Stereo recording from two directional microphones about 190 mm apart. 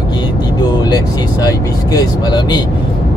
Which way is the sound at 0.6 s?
20° left (ahead or behind).